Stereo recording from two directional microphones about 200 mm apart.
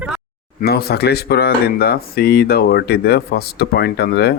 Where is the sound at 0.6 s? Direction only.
50° left (ahead or behind).